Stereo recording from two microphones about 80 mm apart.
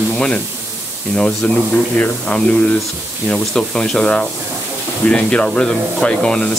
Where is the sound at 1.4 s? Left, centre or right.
Centre.